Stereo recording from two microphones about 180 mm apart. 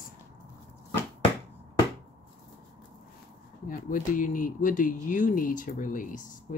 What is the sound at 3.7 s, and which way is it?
Speech, 50° left (ahead or behind).